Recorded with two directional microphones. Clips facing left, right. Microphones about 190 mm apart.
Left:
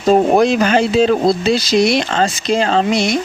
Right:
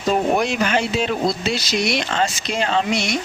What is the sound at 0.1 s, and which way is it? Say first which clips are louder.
Speech: left 8 dB; 35° left (ahead or behind).